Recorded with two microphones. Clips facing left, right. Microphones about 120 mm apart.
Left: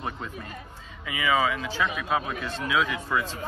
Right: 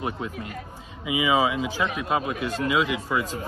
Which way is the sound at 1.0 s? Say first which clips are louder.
Right 3 dB; 15° right (ahead or behind).